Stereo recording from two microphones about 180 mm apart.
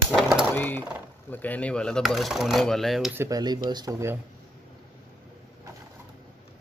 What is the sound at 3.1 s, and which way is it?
Speech, 20° right (ahead or behind).